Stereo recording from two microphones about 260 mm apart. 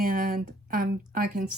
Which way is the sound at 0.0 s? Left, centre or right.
Right.